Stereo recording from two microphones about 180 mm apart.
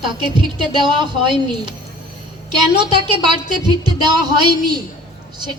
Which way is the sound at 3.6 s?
25° right (ahead or behind).